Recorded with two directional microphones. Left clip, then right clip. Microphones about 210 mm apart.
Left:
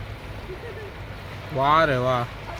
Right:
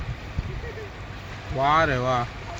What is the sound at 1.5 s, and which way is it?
Speech, 5° left (ahead or behind).